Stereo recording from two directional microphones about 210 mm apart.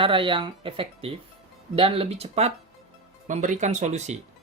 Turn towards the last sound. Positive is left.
turn(degrees=-35)  # may be behind; listen again after turning